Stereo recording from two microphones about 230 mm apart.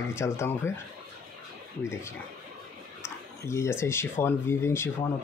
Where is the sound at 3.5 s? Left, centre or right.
Centre.